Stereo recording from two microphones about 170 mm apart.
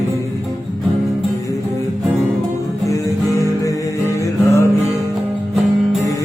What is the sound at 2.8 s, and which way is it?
Music, 20° left (ahead or behind).